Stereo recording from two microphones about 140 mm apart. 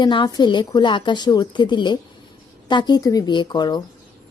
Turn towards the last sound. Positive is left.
turn(degrees=30)  # may be behind; listen again after turning